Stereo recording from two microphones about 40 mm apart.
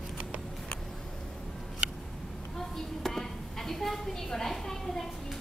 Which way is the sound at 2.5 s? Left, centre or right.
Centre.